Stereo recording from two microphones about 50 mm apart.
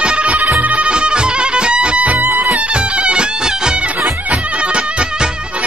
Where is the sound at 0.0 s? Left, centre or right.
Right.